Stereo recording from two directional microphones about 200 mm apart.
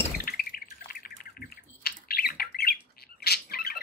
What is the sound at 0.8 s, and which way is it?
Bird, 45° left (ahead or behind).